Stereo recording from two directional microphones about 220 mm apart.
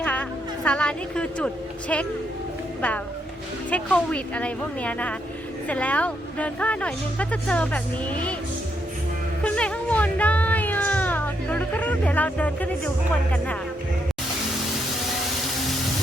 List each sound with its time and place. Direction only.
0.0 s music: 5° left (ahead or behind)
3.7 s speech: 5° left (ahead or behind)
9.4 s a sound: 5° left (ahead or behind)